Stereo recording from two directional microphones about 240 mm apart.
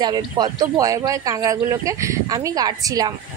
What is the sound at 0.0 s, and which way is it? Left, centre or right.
A woman's voice, centre.